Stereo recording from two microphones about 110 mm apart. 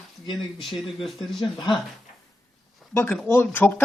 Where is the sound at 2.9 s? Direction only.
20° left (ahead or behind).